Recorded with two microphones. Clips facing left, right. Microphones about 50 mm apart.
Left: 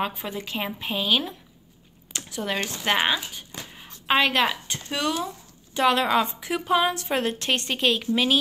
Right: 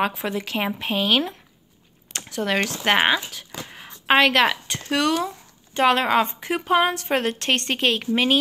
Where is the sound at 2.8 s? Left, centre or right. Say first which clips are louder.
Right 3 dB; right.